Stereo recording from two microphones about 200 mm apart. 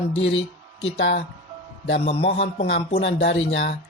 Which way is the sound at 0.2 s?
70° left (ahead or behind).